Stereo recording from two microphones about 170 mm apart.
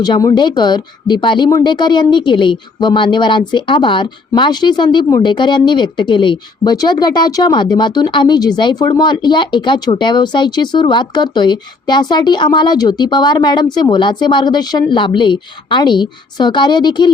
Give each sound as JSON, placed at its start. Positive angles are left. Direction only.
{"t": 0.0, "sound": "speech", "side_deg": 20}